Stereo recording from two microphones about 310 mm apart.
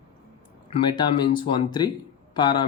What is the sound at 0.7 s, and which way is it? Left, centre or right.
Speech, centre.